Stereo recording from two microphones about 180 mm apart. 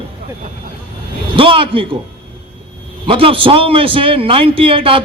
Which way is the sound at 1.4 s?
30° right (ahead or behind).